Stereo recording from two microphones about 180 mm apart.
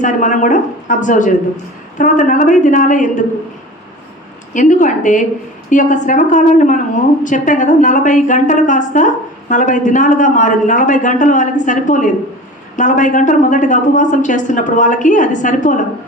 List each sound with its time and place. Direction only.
0.0 s a woman's voice: 45° left (ahead or behind)
4.5 s a woman's voice: 45° left (ahead or behind)